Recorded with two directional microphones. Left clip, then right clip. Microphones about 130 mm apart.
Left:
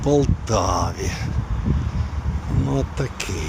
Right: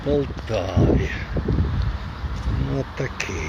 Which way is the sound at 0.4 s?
60° left (ahead or behind).